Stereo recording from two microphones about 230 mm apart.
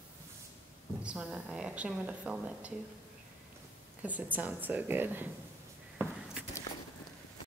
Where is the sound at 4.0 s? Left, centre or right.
Centre.